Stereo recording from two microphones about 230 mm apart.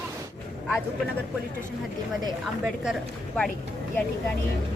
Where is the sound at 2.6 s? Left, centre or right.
Centre.